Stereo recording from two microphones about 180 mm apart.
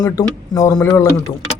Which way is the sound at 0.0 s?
15° left (ahead or behind).